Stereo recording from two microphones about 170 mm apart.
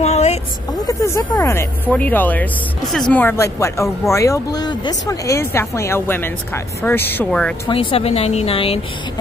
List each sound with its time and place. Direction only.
0.0 s vehicle: 40° left (ahead or behind)
0.8 s speech: 20° left (ahead or behind)
7.6 s speech: 30° left (ahead or behind)